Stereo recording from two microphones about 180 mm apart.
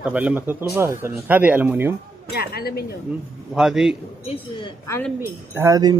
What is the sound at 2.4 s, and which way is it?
Speech, 60° left (ahead or behind).